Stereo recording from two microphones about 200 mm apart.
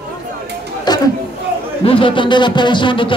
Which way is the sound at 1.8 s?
25° left (ahead or behind).